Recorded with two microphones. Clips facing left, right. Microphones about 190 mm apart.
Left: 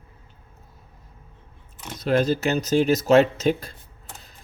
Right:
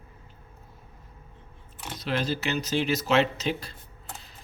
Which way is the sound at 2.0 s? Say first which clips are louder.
Left 8 dB; 45° left (ahead or behind).